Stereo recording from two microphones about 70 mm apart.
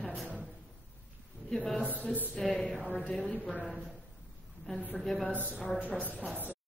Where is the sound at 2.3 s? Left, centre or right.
Centre.